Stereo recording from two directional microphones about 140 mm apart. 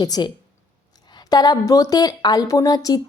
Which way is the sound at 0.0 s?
30° left (ahead or behind).